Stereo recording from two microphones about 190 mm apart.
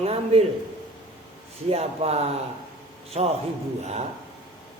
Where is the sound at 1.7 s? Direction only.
35° right (ahead or behind).